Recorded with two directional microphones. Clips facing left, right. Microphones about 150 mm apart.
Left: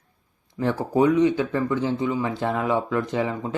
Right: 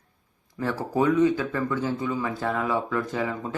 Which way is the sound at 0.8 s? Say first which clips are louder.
Left 2 dB; 20° left (ahead or behind).